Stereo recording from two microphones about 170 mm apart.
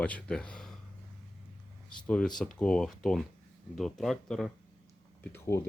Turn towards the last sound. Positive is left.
turn(degrees=15)  # may be behind; listen again after turning